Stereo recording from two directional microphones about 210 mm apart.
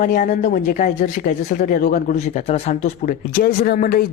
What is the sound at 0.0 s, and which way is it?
Speech, 40° left (ahead or behind).